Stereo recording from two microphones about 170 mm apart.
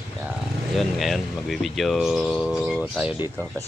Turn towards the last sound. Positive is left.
turn(degrees=-5)  # may be behind; listen again after turning